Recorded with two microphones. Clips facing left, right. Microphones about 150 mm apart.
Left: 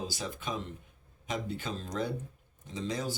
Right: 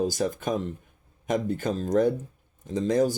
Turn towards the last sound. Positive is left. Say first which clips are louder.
# right 12 dB
turn(degrees=-50)  # may be behind; listen again after turning